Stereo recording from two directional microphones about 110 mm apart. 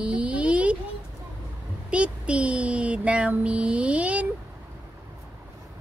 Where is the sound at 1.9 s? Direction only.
10° right (ahead or behind).